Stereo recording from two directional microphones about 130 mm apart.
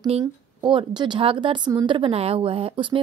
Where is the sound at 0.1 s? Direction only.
50° right (ahead or behind).